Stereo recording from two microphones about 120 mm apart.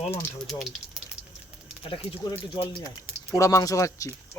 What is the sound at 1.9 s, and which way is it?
Speech, 50° left (ahead or behind).